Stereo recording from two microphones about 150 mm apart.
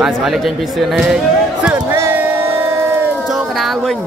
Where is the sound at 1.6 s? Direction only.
15° right (ahead or behind).